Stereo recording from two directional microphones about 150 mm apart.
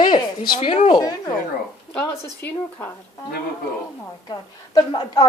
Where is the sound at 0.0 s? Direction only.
30° left (ahead or behind).